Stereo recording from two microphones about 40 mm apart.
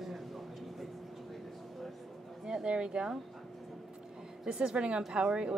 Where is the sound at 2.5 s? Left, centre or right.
Right.